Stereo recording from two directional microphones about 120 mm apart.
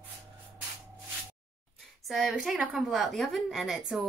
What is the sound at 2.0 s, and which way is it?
A woman's voice, centre (ahead or behind).